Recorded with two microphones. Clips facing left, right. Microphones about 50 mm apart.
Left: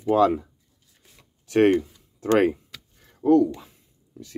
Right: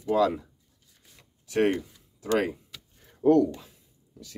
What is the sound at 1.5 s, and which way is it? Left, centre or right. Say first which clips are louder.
Speech: left 6 dB; left.